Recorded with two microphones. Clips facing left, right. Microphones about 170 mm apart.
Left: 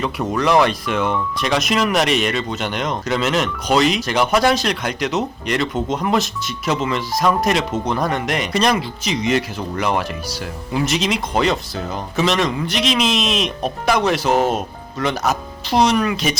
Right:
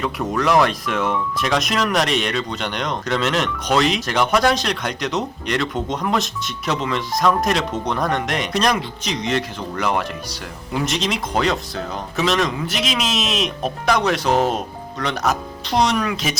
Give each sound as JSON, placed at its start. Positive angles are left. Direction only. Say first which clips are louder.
{"t": 0.0, "sound": "speech", "louder": "left 1 dB", "side_deg": 0}